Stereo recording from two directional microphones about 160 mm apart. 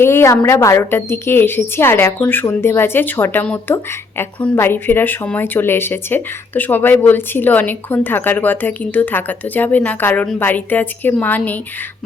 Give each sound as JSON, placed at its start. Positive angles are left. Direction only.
{"t": 0.0, "sound": "speech", "side_deg": 15}